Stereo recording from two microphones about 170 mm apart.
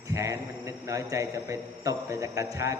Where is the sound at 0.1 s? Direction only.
20° right (ahead or behind).